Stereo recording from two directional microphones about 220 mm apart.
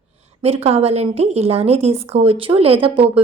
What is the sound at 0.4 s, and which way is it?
A woman's voice, 30° right (ahead or behind).